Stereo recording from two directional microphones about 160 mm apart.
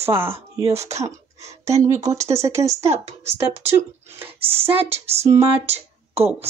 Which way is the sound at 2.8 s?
40° right (ahead or behind).